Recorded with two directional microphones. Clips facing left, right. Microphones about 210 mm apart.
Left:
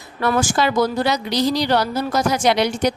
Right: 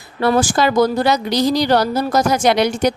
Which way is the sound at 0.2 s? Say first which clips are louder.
Right 4 dB; 30° right (ahead or behind).